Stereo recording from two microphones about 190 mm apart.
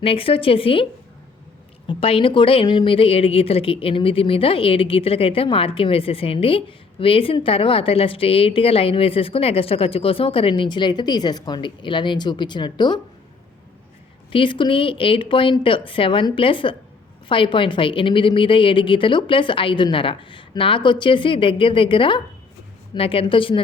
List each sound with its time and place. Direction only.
0.0 s a woman's voice: 30° left (ahead or behind)
1.9 s a woman's voice: 30° left (ahead or behind)
14.3 s a woman's voice: 25° left (ahead or behind)